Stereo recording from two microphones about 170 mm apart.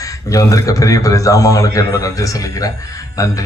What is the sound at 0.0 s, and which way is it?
A man's voice, 20° left (ahead or behind).